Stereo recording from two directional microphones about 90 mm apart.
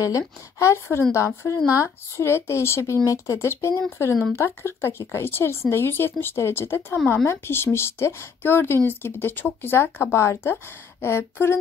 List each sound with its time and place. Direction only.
0.6 s speech: 35° left (ahead or behind)